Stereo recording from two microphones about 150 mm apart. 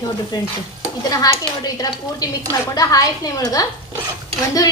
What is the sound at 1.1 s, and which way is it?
Speech, 25° left (ahead or behind).